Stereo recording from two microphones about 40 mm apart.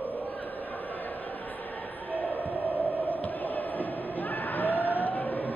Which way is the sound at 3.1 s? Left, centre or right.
Left.